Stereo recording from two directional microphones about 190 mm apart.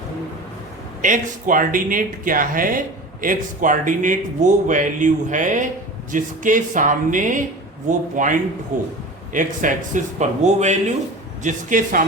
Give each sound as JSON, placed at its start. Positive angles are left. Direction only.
{"t": 1.0, "sound": "speech", "side_deg": -45}